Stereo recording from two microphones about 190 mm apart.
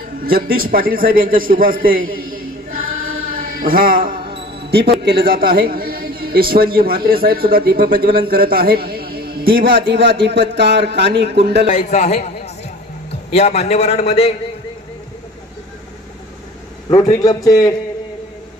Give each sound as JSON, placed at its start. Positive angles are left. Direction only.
{"t": 0.2, "sound": "a man's voice", "side_deg": -50}
{"t": 3.3, "sound": "music", "side_deg": -50}
{"t": 4.3, "sound": "music", "side_deg": -30}
{"t": 4.6, "sound": "a man's voice", "side_deg": -60}
{"t": 9.6, "sound": "a man's voice", "side_deg": -65}
{"t": 11.6, "sound": "a man's voice", "side_deg": 40}
{"t": 16.9, "sound": "a man's voice", "side_deg": 20}